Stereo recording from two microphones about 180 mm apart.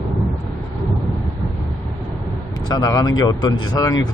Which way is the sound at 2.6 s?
20° left (ahead or behind).